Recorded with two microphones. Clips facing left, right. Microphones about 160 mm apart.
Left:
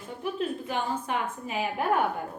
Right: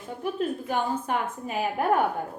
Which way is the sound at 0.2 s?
45° right (ahead or behind).